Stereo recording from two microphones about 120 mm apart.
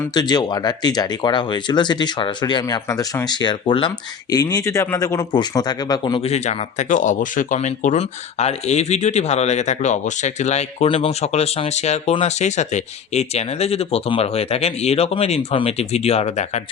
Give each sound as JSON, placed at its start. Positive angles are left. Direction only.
{"t": 0.1, "sound": "speech", "side_deg": 35}
{"t": 6.2, "sound": "speech", "side_deg": 65}
{"t": 10.8, "sound": "speech", "side_deg": 55}